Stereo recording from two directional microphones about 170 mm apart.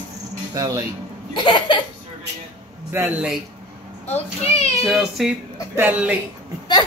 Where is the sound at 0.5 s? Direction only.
20° right (ahead or behind).